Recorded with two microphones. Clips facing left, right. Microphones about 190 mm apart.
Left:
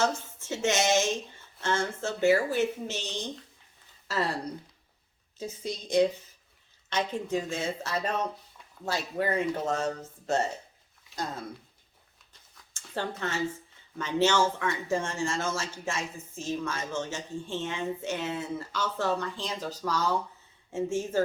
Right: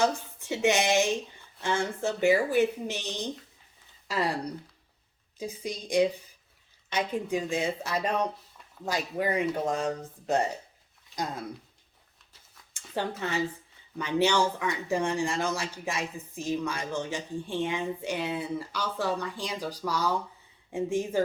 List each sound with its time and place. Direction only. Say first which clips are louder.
0.0 s a woman's voice: right 2 dB; 15° right (ahead or behind)
5.4 s a woman's voice: right 1 dB; 10° right (ahead or behind)
13.0 s a woman's voice: right 1 dB; 15° right (ahead or behind)